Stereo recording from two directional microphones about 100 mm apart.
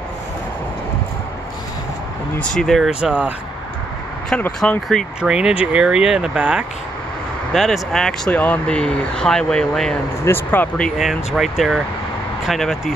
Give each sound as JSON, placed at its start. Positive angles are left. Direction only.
{"t": 2.3, "sound": "speech", "side_deg": 10}
{"t": 2.9, "sound": "speech", "side_deg": -10}
{"t": 4.4, "sound": "speech", "side_deg": 10}
{"t": 5.2, "sound": "speech", "side_deg": -10}
{"t": 7.5, "sound": "speech", "side_deg": 0}
{"t": 10.2, "sound": "speech", "side_deg": 20}
{"t": 11.0, "sound": "speech", "side_deg": -5}